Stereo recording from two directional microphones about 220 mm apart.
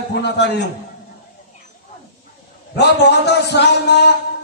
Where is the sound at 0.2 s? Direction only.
50° left (ahead or behind).